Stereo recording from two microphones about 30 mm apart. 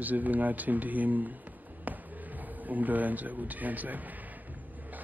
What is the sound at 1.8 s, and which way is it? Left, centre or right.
Music, right.